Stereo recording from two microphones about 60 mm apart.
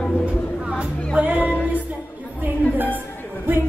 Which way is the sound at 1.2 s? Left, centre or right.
Right.